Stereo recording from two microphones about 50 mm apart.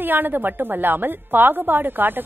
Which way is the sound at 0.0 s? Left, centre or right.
Right.